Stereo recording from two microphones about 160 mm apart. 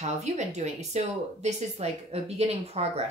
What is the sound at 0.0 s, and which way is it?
Speech, 45° right (ahead or behind).